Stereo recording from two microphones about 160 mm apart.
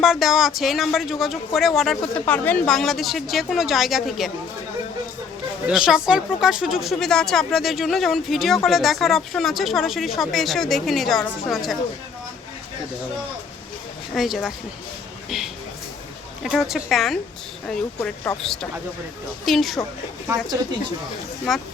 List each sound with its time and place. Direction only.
0.0 s speech: centre (ahead or behind)
5.6 s speech: 5° right (ahead or behind)
14.1 s speech: centre (ahead or behind)
16.4 s speech: centre (ahead or behind)
20.2 s speech: 20° right (ahead or behind)
21.5 s speech: centre (ahead or behind)